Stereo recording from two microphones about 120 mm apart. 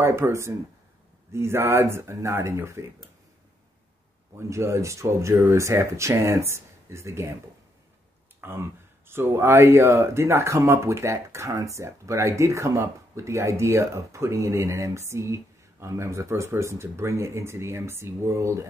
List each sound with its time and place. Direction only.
0.0 s speech: 20° right (ahead or behind)
4.4 s speech: 25° right (ahead or behind)
8.4 s speech: 20° right (ahead or behind)